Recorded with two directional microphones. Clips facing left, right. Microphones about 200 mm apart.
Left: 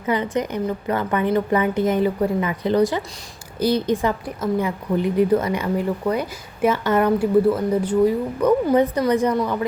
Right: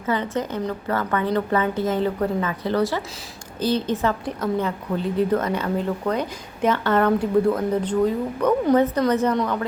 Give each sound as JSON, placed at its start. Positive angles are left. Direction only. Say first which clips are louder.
{"t": 0.0, "sound": "a woman's voice", "louder": "left 2 dB", "side_deg": 15}